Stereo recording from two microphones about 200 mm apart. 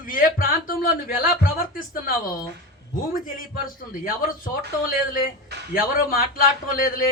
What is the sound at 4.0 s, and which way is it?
Speech, 45° left (ahead or behind).